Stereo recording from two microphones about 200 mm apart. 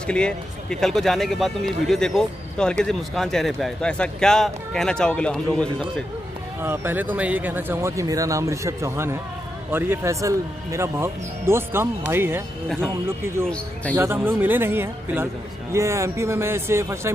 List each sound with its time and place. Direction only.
0.0 s speech: 5° left (ahead or behind)
6.6 s speech: 10° right (ahead or behind)
13.9 s speech: 10° right (ahead or behind)